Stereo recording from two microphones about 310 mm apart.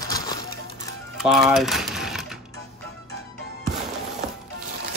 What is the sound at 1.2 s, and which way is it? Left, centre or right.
Speech, centre.